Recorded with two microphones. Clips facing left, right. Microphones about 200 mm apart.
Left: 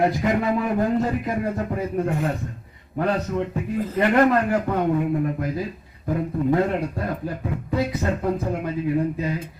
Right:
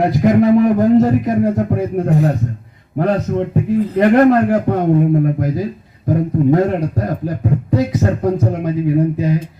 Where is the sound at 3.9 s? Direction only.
40° right (ahead or behind).